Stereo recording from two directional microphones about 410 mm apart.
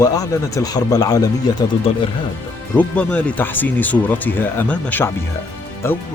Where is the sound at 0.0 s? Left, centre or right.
Centre.